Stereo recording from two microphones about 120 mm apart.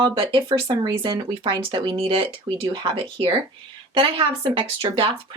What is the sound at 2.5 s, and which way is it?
Speech, 35° right (ahead or behind).